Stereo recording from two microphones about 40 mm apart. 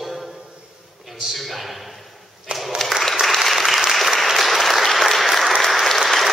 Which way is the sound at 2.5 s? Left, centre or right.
Right.